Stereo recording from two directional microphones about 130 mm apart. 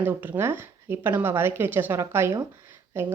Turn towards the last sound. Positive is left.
turn(degrees=-20)  # may be behind; listen again after turning